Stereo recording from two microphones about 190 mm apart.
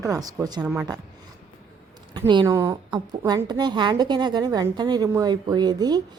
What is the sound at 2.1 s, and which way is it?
A woman's voice, 25° right (ahead or behind).